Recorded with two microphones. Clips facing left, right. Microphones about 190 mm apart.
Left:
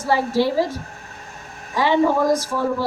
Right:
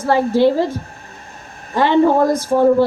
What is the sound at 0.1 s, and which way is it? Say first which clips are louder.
A woman's voice: right 5 dB; 55° right (ahead or behind).